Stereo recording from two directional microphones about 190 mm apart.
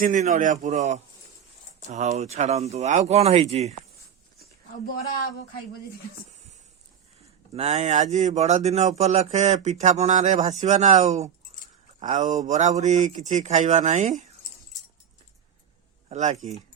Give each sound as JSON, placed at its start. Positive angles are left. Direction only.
{"t": 0.0, "sound": "speech", "side_deg": -45}
{"t": 7.5, "sound": "speech", "side_deg": -35}
{"t": 16.0, "sound": "speech", "side_deg": -35}